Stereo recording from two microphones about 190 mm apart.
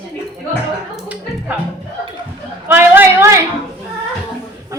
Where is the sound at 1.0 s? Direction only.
5° right (ahead or behind).